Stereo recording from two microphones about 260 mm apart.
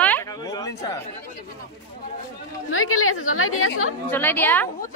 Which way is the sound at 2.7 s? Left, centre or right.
Left.